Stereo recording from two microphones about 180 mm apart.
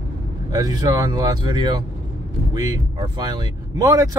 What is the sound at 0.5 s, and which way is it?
Speech, 20° right (ahead or behind).